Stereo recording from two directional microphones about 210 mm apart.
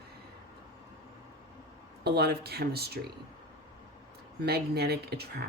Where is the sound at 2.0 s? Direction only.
50° right (ahead or behind).